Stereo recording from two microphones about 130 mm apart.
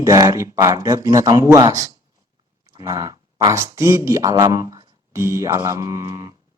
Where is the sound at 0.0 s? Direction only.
25° right (ahead or behind).